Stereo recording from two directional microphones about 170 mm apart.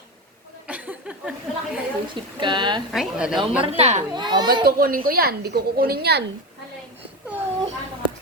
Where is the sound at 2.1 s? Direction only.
30° right (ahead or behind).